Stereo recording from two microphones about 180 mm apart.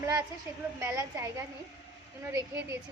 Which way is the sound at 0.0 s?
15° right (ahead or behind).